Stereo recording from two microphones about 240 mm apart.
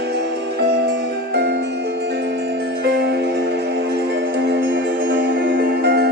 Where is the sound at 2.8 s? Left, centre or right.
Right.